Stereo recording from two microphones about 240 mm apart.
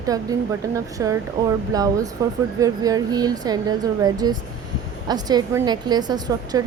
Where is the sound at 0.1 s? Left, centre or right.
Centre.